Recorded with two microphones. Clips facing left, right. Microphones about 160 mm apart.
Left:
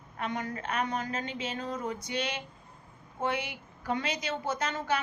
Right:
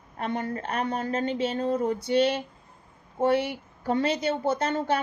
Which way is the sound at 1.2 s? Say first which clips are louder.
Right 9 dB; 50° right (ahead or behind).